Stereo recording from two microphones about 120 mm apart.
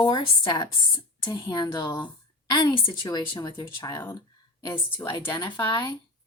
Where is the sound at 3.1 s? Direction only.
35° left (ahead or behind).